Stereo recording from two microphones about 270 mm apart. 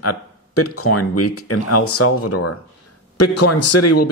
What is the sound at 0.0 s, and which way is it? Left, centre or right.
Speech, left.